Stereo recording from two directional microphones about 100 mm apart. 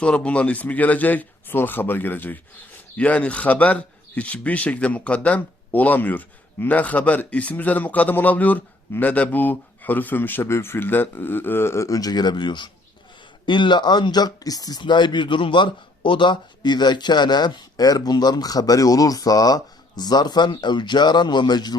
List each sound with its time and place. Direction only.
0.0 s a man's voice: 10° left (ahead or behind); by 14.8 s 40° left (ahead or behind)
14.8 s a man's voice: 50° left (ahead or behind)